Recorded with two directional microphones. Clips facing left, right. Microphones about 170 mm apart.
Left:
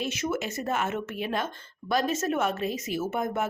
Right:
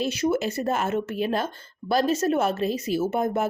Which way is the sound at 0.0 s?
35° right (ahead or behind).